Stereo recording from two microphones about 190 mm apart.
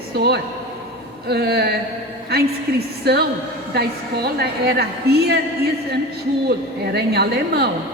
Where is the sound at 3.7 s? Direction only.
55° right (ahead or behind).